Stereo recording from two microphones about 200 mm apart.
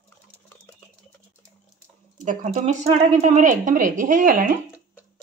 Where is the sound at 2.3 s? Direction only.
40° right (ahead or behind).